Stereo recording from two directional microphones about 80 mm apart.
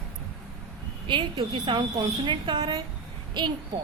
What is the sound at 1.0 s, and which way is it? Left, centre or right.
A woman's voice, right.